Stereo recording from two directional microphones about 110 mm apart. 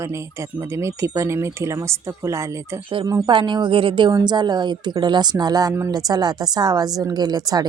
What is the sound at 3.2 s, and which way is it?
A woman's voice, 45° right (ahead or behind).